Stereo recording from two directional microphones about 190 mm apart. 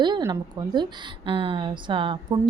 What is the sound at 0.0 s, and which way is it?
A woman's voice, 20° right (ahead or behind).